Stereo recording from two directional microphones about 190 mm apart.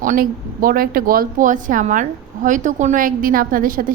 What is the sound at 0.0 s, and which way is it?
A woman's voice, 45° right (ahead or behind).